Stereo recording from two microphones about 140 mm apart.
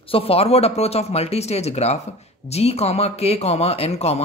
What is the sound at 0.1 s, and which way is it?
Speech, 45° left (ahead or behind).